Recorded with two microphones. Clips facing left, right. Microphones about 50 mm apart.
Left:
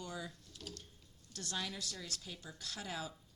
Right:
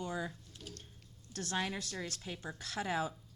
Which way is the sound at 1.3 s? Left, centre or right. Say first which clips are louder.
Right 6 dB; right.